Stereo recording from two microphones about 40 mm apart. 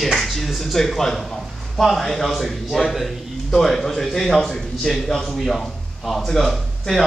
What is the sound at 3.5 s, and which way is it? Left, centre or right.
A man's voice, centre.